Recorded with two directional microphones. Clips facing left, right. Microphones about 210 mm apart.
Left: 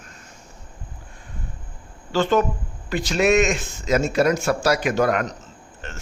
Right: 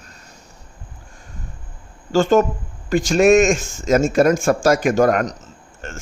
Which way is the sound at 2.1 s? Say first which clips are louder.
Right 5 dB; 45° right (ahead or behind).